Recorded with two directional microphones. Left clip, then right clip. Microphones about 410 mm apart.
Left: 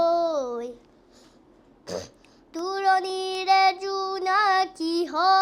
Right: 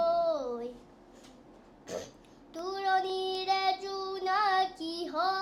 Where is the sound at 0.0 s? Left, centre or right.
Left.